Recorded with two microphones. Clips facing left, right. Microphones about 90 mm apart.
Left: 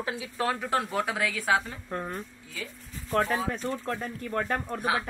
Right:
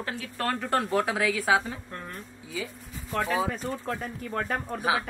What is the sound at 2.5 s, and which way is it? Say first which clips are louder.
Speech: right 9 dB; 5° right (ahead or behind).